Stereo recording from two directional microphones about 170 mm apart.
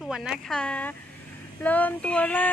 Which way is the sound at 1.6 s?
10° left (ahead or behind).